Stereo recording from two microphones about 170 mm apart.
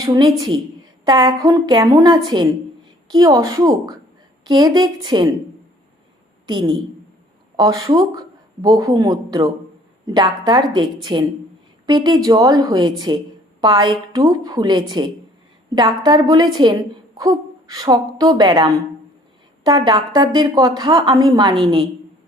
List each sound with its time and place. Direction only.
0.0 s a woman's voice: 25° right (ahead or behind)
6.4 s a woman's voice: 25° right (ahead or behind)